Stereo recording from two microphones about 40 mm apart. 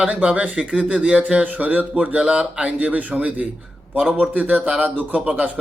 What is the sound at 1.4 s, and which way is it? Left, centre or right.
Speech, right.